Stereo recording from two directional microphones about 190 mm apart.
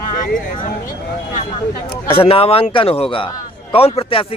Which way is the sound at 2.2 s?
30° left (ahead or behind).